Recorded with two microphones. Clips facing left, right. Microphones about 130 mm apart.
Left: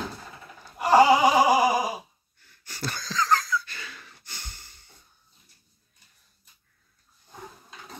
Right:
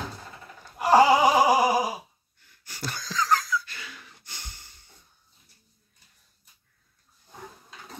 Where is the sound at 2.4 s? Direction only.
10° right (ahead or behind).